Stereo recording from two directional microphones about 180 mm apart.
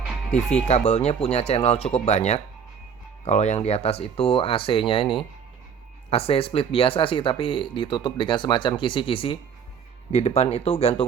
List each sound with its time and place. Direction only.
0.3 s speech: 40° left (ahead or behind)